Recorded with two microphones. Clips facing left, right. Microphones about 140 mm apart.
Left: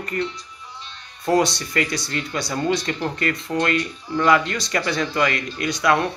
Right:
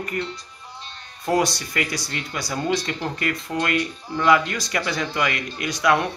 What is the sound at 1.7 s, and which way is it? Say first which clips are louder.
Speech: left 3 dB; 10° right (ahead or behind).